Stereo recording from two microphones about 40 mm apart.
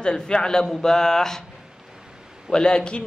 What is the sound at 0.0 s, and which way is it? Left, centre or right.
A man's voice, centre.